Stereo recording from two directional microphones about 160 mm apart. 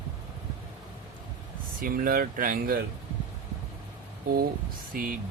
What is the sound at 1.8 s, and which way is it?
Speech, 65° right (ahead or behind).